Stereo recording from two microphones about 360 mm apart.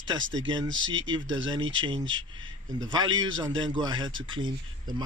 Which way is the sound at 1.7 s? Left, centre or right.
Centre.